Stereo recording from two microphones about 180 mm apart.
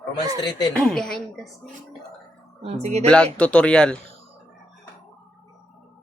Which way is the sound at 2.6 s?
35° right (ahead or behind).